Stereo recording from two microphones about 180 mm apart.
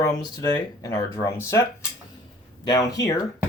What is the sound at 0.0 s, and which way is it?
Speech, 20° left (ahead or behind).